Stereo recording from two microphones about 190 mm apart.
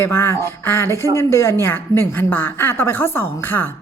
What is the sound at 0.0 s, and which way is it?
A woman's voice, 15° left (ahead or behind).